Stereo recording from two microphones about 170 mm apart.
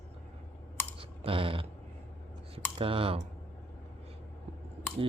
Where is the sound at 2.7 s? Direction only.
30° right (ahead or behind).